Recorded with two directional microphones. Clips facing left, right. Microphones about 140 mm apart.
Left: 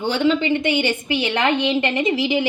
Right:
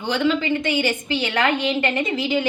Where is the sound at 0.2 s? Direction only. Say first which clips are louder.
Left 2 dB; 20° left (ahead or behind).